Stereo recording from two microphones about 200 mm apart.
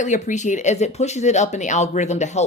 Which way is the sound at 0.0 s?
40° left (ahead or behind).